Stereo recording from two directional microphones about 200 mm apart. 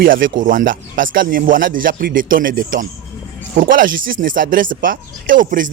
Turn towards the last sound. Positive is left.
turn(degrees=-45)  # may be behind; listen again after turning